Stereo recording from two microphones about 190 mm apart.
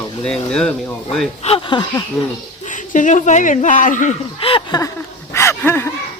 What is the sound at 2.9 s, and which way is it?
Speech, 40° left (ahead or behind).